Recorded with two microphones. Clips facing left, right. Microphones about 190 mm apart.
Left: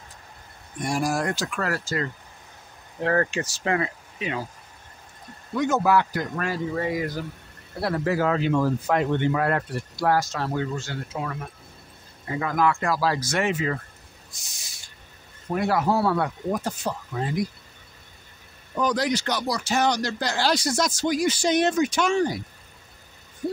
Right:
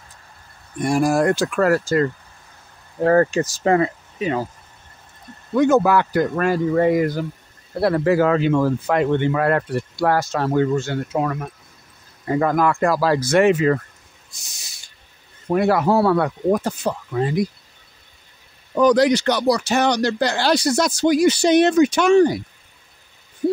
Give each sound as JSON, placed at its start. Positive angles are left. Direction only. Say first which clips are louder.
{"t": 0.8, "sound": "speech", "louder": "right 8 dB", "side_deg": -55}
{"t": 3.0, "sound": "speech", "louder": "right 8 dB", "side_deg": -40}
{"t": 5.6, "sound": "speech", "louder": "right 6 dB", "side_deg": -60}
{"t": 7.8, "sound": "speech", "louder": "right 7 dB", "side_deg": -65}
{"t": 14.4, "sound": "owl", "louder": "right 1 dB", "side_deg": -75}
{"t": 15.5, "sound": "speech", "louder": "right 6 dB", "side_deg": -65}
{"t": 18.8, "sound": "speech", "louder": "right 9 dB", "side_deg": -70}